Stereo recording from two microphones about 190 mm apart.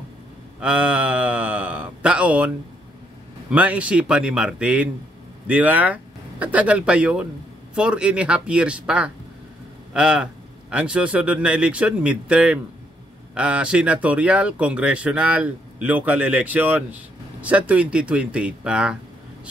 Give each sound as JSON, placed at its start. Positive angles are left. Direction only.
{"t": 0.6, "sound": "a man's voice", "side_deg": -5}